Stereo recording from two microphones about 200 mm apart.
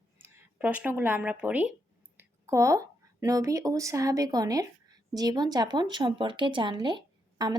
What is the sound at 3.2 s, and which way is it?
Speech, 15° right (ahead or behind).